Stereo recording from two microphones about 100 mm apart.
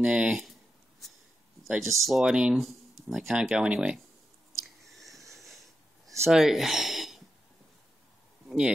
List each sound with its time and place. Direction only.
0.0 s speech: 10° right (ahead or behind)
1.7 s speech: centre (ahead or behind)
4.5 s chewing: centre (ahead or behind)
5.3 s wheeze: centre (ahead or behind)
6.3 s gasp: 5° right (ahead or behind)
8.5 s a sound: 5° right (ahead or behind)